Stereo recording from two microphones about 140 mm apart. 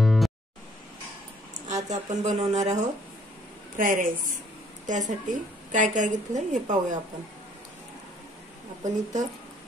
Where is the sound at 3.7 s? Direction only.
70° right (ahead or behind).